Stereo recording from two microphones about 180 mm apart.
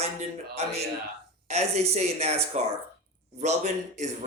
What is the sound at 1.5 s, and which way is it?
Speech, 35° right (ahead or behind).